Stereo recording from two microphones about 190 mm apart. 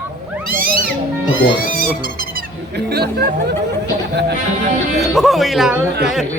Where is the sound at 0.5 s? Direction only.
50° right (ahead or behind).